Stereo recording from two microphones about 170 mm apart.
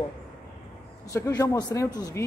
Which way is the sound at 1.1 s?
20° left (ahead or behind).